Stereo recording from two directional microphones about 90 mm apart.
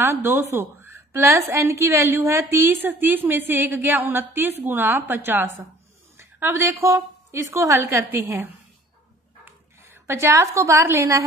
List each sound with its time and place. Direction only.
0.0 s a woman's voice: 30° right (ahead or behind)